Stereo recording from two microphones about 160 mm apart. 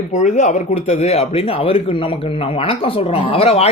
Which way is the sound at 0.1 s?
45° left (ahead or behind).